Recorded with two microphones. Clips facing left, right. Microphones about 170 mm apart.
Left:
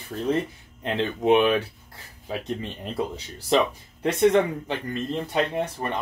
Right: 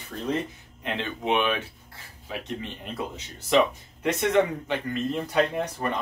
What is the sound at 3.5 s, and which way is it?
Speech, 35° left (ahead or behind).